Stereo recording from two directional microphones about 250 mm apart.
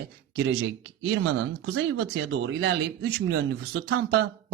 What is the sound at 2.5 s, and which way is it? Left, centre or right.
Speech, right.